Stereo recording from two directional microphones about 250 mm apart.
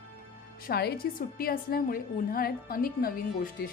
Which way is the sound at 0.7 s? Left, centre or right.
Left.